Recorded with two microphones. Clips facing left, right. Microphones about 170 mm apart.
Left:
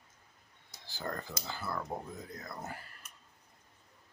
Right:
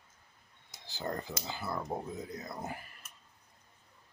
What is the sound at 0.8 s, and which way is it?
Speech, 20° right (ahead or behind).